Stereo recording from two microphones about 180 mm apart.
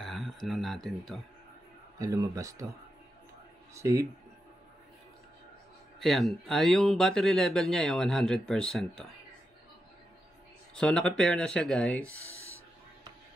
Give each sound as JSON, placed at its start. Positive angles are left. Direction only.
{"t": 0.0, "sound": "a sound", "side_deg": 0}
{"t": 0.8, "sound": "speech", "side_deg": 0}
{"t": 2.0, "sound": "a man's voice", "side_deg": -20}
{"t": 3.7, "sound": "speech", "side_deg": -15}
{"t": 5.9, "sound": "speech", "side_deg": 0}
{"t": 10.7, "sound": "speech", "side_deg": 5}
{"t": 12.2, "sound": "a sound", "side_deg": -15}